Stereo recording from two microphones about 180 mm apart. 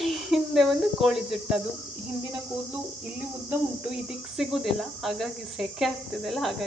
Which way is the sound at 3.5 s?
5° right (ahead or behind).